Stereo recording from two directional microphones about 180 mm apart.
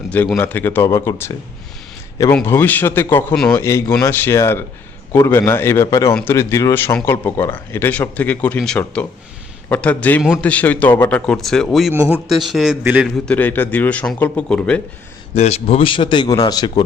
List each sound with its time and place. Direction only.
0.1 s a man's voice: 10° left (ahead or behind); by 13.1 s 5° right (ahead or behind)
13.2 s speech: 10° left (ahead or behind)
15.4 s speech: 35° left (ahead or behind)